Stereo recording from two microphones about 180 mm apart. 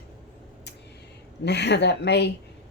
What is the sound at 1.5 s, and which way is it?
Speech, 70° left (ahead or behind).